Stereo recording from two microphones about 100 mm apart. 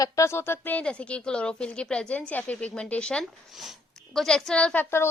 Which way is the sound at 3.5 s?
Centre (ahead or behind).